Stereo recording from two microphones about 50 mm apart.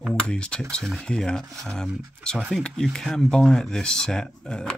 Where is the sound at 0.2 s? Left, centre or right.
Centre.